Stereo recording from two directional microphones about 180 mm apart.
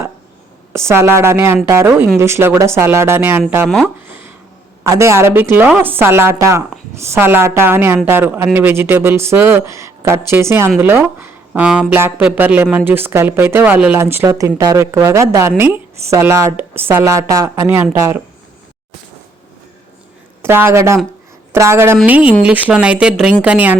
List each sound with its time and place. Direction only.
0.7 s speech: 15° right (ahead or behind)
3.8 s a sound: 10° right (ahead or behind)
4.8 s speech: 15° right (ahead or behind)
20.4 s speech: 15° right (ahead or behind)